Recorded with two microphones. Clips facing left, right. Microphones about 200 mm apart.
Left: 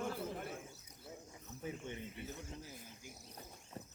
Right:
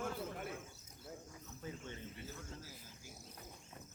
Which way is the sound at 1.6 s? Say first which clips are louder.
Left 3 dB; 15° left (ahead or behind).